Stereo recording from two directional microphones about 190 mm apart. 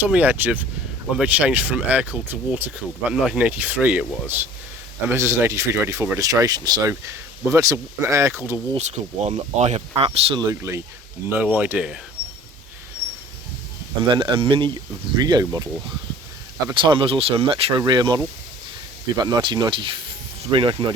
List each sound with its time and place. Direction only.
0.0 s speech: 10° right (ahead or behind)
8.7 s speech: 35° right (ahead or behind); by 11.9 s 5° right (ahead or behind)
14.1 s speech: 25° right (ahead or behind)
16.6 s speech: 25° right (ahead or behind)